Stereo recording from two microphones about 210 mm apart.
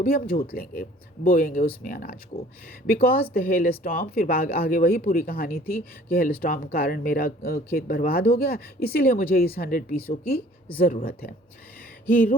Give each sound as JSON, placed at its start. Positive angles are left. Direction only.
{"t": 0.0, "sound": "speech", "side_deg": 40}
{"t": 12.0, "sound": "speech", "side_deg": 10}